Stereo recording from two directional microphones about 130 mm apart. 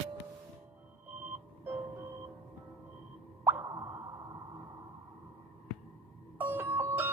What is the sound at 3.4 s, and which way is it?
Plop, 15° right (ahead or behind).